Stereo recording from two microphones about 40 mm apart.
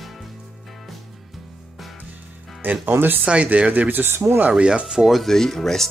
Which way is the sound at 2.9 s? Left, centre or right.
Right.